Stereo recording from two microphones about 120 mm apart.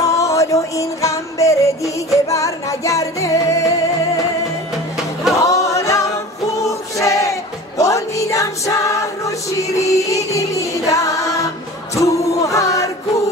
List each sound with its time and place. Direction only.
0.0 s music: 25° left (ahead or behind)
5.3 s music: 25° left (ahead or behind)